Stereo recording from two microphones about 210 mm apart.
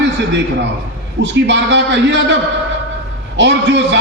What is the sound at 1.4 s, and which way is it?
Speech, 55° right (ahead or behind).